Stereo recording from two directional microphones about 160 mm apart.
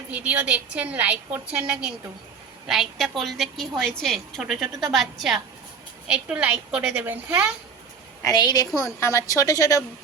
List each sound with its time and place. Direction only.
0.1 s a woman's voice: 10° right (ahead or behind)
8.2 s a woman's voice: 25° left (ahead or behind)